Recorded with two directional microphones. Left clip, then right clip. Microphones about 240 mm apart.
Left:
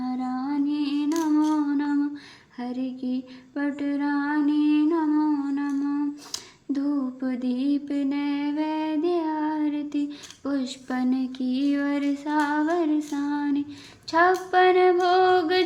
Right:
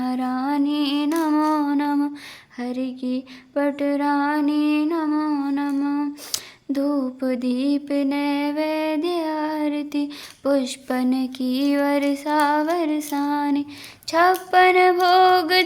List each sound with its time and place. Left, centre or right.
0.0 s music: right
2.6 s mantra: right
6.3 s a sound: right